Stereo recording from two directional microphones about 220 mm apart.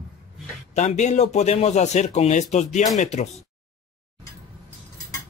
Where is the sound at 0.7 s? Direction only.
30° left (ahead or behind).